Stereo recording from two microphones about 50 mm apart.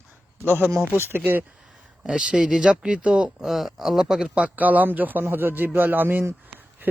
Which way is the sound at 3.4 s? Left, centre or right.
Centre.